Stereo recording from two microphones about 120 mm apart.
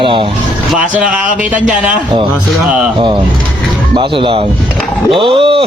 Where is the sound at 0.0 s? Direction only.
45° right (ahead or behind).